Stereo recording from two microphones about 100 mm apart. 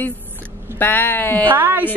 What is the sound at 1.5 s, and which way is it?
Speech, 20° right (ahead or behind).